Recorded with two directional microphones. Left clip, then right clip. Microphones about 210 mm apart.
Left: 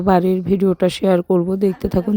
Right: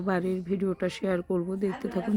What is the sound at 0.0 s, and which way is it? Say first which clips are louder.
Speech: left 13 dB; 35° left (ahead or behind).